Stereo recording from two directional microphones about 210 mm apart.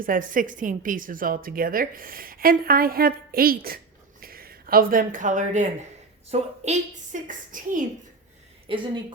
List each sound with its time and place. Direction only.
0.0 s a woman's voice: 40° right (ahead or behind)
8.6 s a woman's voice: 25° right (ahead or behind)